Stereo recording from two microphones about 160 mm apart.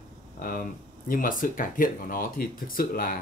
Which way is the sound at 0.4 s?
60° left (ahead or behind).